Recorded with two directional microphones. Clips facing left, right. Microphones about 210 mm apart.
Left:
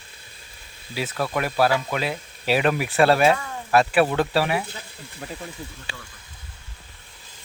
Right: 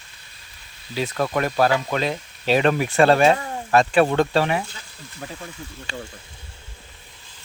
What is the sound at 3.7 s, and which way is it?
Speech, 5° left (ahead or behind).